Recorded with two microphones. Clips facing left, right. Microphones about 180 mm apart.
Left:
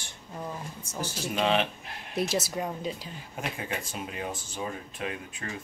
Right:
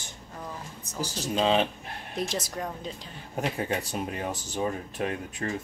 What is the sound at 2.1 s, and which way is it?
Speech, 10° left (ahead or behind).